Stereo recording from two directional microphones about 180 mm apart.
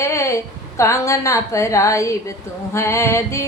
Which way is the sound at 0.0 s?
15° left (ahead or behind).